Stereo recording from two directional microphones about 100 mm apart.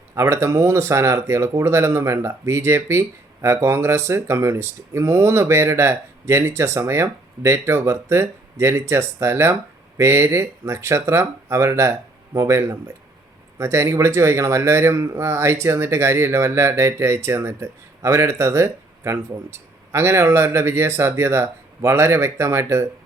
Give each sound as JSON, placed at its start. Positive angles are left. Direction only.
{"t": 0.1, "sound": "speech", "side_deg": -30}